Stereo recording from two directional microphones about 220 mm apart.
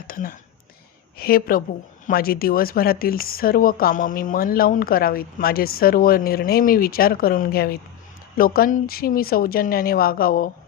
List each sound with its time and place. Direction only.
0.1 s speech: 40° left (ahead or behind)